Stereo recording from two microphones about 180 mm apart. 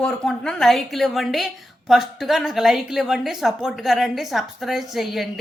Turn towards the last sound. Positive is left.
turn(degrees=0)  # may be behind; listen again after turning